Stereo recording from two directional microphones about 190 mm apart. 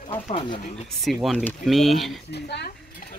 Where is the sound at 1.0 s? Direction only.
Centre (ahead or behind).